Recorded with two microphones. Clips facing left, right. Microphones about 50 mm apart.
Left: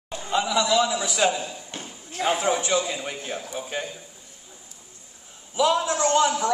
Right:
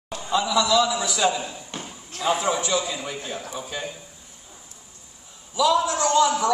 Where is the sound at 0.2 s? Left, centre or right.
Left.